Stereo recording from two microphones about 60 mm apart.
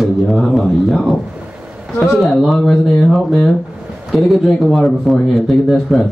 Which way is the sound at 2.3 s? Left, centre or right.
Centre.